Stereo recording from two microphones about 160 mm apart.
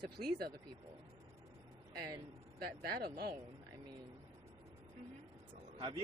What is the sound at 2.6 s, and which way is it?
Speech, 75° right (ahead or behind).